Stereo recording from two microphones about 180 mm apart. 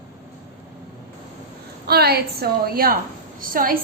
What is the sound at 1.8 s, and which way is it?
A woman's voice, 60° right (ahead or behind).